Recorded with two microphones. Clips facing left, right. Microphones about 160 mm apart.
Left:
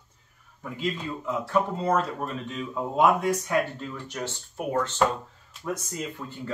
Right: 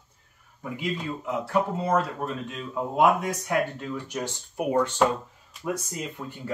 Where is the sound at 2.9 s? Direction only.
15° right (ahead or behind).